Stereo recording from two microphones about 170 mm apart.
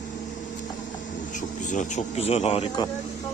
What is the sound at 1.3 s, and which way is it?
Speech, 45° left (ahead or behind).